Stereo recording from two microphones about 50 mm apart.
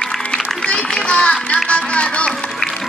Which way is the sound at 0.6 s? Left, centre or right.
Centre.